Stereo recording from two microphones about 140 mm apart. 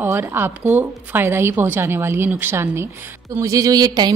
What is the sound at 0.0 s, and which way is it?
A woman's voice, 15° right (ahead or behind).